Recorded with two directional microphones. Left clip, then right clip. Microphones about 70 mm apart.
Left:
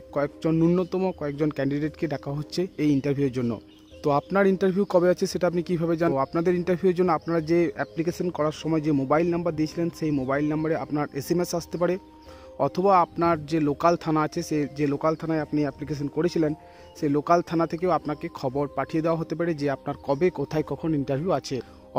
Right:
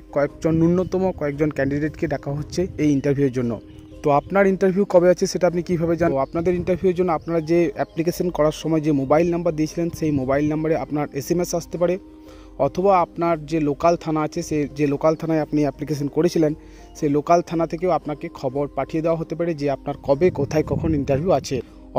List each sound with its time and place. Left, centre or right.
0.1 s speech: right
0.5 s speech: right
0.7 s speech: right
4.4 s speech: right
6.0 s speech: centre
7.3 s speech: right
7.7 s speech: right
9.1 s speech: right
11.1 s speech: right
14.8 s speech: right
17.0 s speech: right
17.6 s speech: right
21.3 s speech: right